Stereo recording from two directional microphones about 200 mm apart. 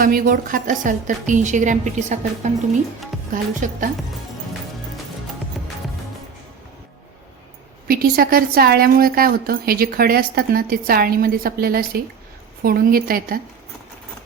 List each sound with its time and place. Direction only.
0.0 s a woman's voice: 45° right (ahead or behind)
7.9 s a woman's voice: 45° right (ahead or behind)